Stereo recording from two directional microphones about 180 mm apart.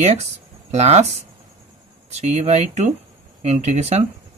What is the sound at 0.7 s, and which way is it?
Speech, 35° right (ahead or behind).